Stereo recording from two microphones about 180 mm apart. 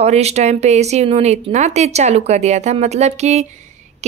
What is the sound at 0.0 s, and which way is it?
Speech, 35° right (ahead or behind).